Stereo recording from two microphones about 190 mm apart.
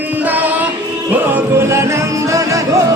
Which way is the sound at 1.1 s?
10° right (ahead or behind).